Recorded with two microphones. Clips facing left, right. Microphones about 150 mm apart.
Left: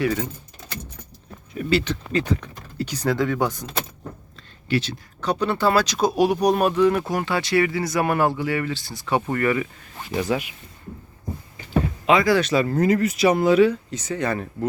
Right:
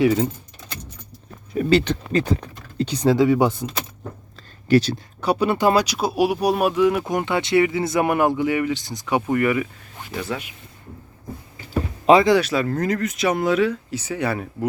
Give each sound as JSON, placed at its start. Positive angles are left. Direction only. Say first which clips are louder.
{"t": 0.0, "sound": "speech", "louder": "right 6 dB", "side_deg": -20}
{"t": 1.5, "sound": "speech", "louder": "right 4 dB", "side_deg": -35}
{"t": 2.7, "sound": "speech", "louder": "right 5 dB", "side_deg": -20}
{"t": 4.4, "sound": "a sound", "louder": "right 7 dB", "side_deg": -35}
{"t": 5.2, "sound": "speech", "louder": "right 3 dB", "side_deg": -10}
{"t": 10.1, "sound": "speech", "louder": "left 5 dB", "side_deg": 15}
{"t": 12.4, "sound": "speech", "louder": "left 1 dB", "side_deg": -5}
{"t": 12.6, "sound": "speech", "louder": "left 3 dB", "side_deg": 5}
{"t": 14.0, "sound": "speech", "louder": "even", "side_deg": -10}